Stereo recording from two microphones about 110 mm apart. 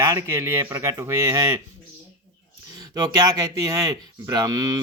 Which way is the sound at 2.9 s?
35° right (ahead or behind).